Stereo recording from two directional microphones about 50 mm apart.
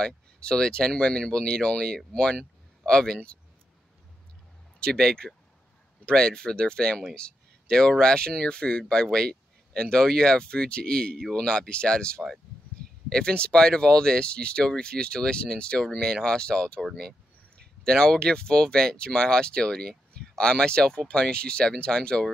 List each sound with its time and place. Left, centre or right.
0.0 s speech: centre
4.7 s speech: centre
7.2 s a sound: centre
8.0 s speech: centre
17.8 s speech: centre